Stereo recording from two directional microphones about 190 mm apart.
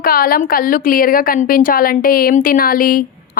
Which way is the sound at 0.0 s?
50° left (ahead or behind).